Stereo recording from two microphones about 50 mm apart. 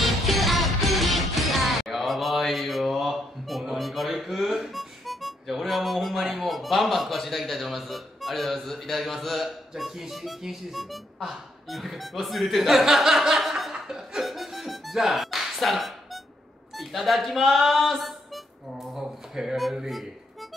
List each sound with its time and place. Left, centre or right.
0.0 s music: centre
3.7 s speech: centre